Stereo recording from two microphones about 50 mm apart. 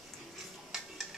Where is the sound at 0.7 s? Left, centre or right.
Centre.